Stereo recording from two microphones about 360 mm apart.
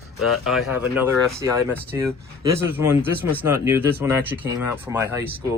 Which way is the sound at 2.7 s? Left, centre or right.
Centre.